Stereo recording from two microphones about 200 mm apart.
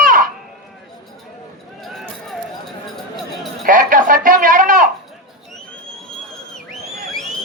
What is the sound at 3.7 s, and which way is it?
Speech, 40° right (ahead or behind).